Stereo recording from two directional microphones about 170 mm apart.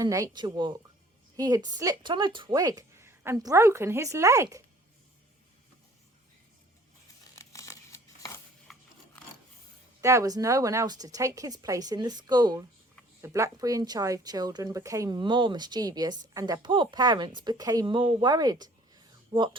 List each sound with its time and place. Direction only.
0.0 s speech: 20° right (ahead or behind)
7.3 s crumpling: 20° left (ahead or behind)
10.0 s speech: 15° right (ahead or behind)